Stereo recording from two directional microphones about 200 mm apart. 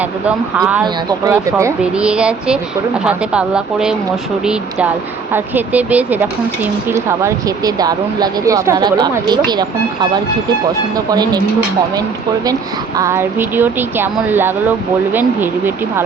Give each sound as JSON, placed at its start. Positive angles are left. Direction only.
{"t": 0.3, "sound": "speech", "side_deg": -5}
{"t": 5.3, "sound": "speech", "side_deg": -10}
{"t": 13.0, "sound": "speech", "side_deg": -15}